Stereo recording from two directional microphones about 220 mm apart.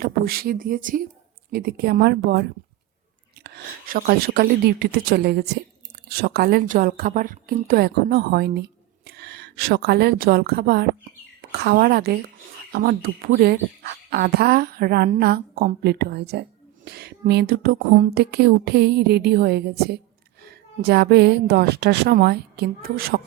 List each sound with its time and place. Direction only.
0.0 s a woman's voice: 40° right (ahead or behind)